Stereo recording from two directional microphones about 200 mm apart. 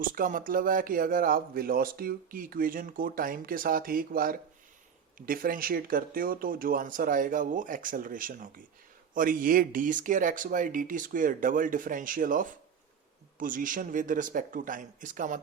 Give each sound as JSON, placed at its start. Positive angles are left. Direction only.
{"t": 0.0, "sound": "speech", "side_deg": -45}